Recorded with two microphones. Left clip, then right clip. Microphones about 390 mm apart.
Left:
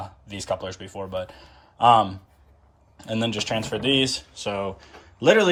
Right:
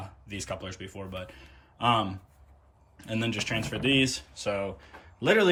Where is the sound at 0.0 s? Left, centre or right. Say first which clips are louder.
Left 5 dB; centre.